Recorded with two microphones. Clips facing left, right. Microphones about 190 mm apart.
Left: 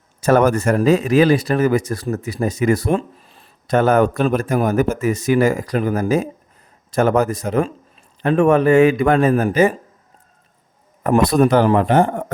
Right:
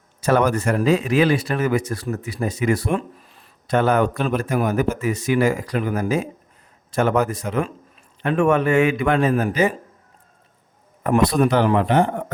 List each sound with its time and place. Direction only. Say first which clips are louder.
0.2 s speech: left 4 dB; 45° left (ahead or behind); by 3.5 s 30° left (ahead or behind)
3.7 s speech: left 4 dB; 45° left (ahead or behind)
11.0 s speech: left 3 dB; 45° left (ahead or behind)